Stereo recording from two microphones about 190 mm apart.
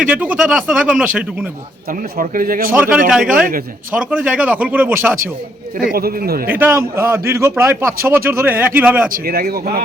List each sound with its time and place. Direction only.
0.1 s a man's voice: 5° right (ahead or behind)
1.9 s a man's voice: 45° right (ahead or behind)
2.7 s a man's voice: 10° right (ahead or behind)
5.8 s a man's voice: 50° right (ahead or behind)
6.5 s a man's voice: 10° right (ahead or behind)
9.0 s a man's voice: 50° right (ahead or behind)